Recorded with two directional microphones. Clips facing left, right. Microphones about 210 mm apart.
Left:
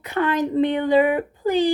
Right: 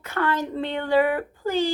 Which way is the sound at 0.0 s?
15° left (ahead or behind).